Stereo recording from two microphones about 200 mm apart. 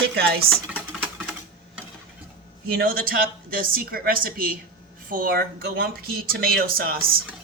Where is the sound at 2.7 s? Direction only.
50° right (ahead or behind).